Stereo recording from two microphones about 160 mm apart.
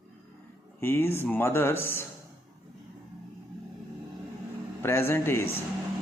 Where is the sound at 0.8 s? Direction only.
15° left (ahead or behind).